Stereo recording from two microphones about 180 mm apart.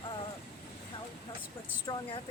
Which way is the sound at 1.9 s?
25° left (ahead or behind).